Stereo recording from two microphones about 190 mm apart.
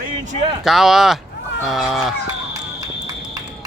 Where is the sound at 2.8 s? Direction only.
20° right (ahead or behind).